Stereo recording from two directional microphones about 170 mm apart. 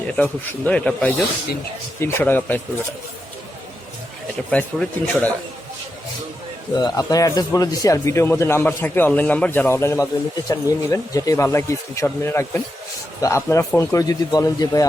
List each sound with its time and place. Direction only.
0.2 s a man's voice: 5° left (ahead or behind)
4.5 s a man's voice: 10° left (ahead or behind)
6.7 s a man's voice: 20° left (ahead or behind)